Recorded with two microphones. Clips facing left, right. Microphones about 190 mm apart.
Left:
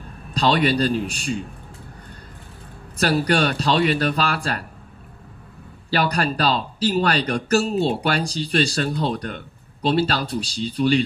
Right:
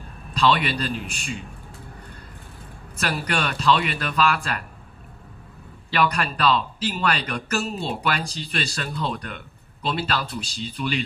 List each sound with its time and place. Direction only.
0.3 s speech: 35° left (ahead or behind)
3.0 s speech: 35° left (ahead or behind)
5.9 s speech: 35° left (ahead or behind)